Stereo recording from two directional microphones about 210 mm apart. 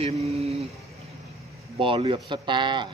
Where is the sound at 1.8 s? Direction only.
25° right (ahead or behind).